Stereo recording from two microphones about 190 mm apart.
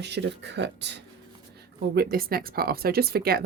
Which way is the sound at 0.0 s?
65° right (ahead or behind).